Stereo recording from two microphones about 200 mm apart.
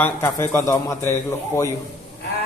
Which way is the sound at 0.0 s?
10° left (ahead or behind).